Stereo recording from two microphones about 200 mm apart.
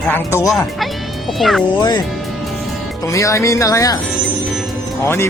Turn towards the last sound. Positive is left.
turn(degrees=15)  # may be behind; listen again after turning